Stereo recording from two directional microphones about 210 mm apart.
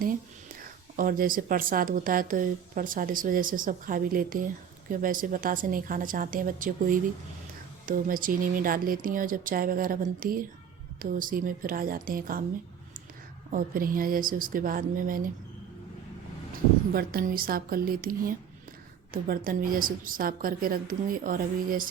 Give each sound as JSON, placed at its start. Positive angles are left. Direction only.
{"t": 0.9, "sound": "a woman's voice", "side_deg": -40}
{"t": 13.5, "sound": "speech", "side_deg": -40}
{"t": 16.9, "sound": "a woman's voice", "side_deg": -45}